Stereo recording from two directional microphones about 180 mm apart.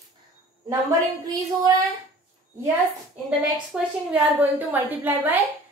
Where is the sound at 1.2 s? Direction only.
20° right (ahead or behind).